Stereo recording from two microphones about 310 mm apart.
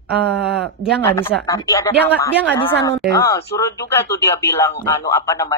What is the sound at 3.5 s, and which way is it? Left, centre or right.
A man's voice, centre.